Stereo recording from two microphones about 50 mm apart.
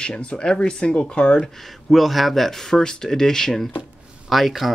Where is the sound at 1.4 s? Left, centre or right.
Centre.